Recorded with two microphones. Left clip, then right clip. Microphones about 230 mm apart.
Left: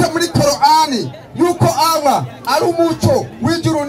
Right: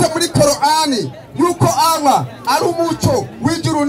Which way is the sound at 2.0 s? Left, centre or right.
Left.